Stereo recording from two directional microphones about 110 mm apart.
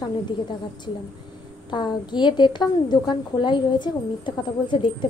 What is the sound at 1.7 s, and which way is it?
A woman's voice, 45° left (ahead or behind).